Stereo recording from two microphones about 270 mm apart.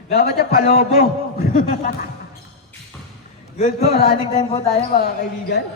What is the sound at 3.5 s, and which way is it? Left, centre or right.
Speech, left.